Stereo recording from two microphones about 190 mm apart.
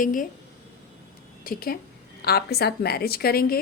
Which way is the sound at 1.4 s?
50° left (ahead or behind).